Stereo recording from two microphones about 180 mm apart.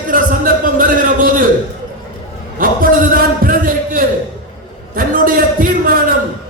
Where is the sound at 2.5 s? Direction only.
50° right (ahead or behind).